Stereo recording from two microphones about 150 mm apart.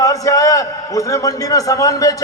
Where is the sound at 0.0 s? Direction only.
20° left (ahead or behind).